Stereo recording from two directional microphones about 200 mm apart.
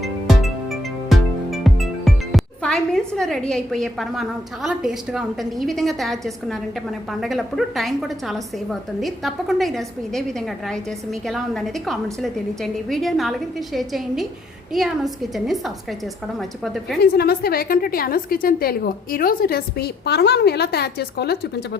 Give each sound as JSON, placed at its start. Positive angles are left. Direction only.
{"t": 0.3, "sound": "music", "side_deg": 0}
{"t": 7.1, "sound": "a woman's voice", "side_deg": 0}
{"t": 17.0, "sound": "a woman's voice", "side_deg": 50}